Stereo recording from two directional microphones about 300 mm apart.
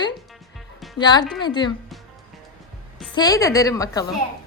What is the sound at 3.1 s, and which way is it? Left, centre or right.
Speech, centre.